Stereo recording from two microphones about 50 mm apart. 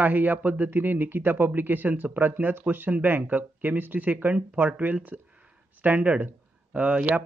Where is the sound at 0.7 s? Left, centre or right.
Right.